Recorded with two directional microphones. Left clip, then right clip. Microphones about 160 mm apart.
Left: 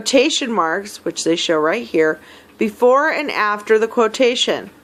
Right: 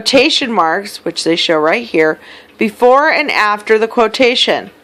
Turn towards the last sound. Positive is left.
turn(degrees=-20)  # may be behind; listen again after turning